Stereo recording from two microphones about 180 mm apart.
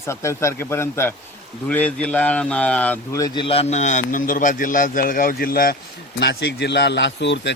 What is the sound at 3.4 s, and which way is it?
A man's voice, 35° left (ahead or behind).